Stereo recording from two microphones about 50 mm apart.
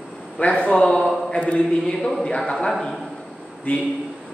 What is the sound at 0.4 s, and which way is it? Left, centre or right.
A man's voice, left.